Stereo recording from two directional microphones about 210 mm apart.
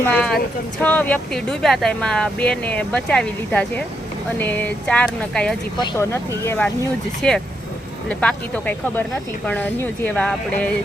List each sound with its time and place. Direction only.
0.0 s speech: 5° left (ahead or behind)
7.2 s speech: centre (ahead or behind)